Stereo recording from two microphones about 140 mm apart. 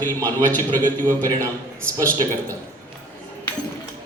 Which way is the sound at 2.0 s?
20° right (ahead or behind).